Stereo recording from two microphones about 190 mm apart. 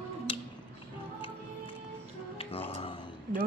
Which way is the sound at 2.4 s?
30° left (ahead or behind).